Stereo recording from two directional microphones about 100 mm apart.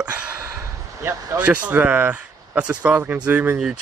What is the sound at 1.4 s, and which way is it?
Speech, 15° right (ahead or behind).